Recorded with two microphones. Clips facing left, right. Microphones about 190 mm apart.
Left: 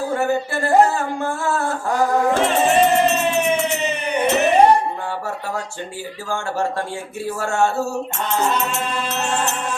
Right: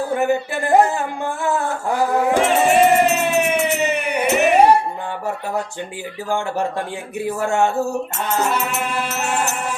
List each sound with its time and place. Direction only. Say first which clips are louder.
0.1 s speech: right 2 dB; 15° right (ahead or behind)
2.3 s music: right 1 dB; 10° right (ahead or behind)
6.3 s speech: right 1 dB; 15° right (ahead or behind)